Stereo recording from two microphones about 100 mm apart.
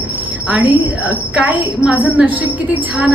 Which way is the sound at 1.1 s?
10° right (ahead or behind).